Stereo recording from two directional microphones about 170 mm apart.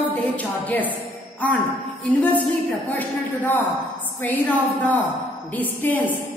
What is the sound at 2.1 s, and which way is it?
A woman's voice, 10° left (ahead or behind).